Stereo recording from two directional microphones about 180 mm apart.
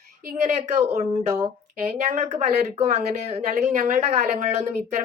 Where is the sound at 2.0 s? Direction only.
40° right (ahead or behind).